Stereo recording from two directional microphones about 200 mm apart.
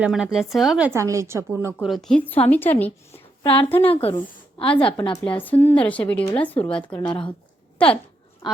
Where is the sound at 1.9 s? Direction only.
Centre (ahead or behind).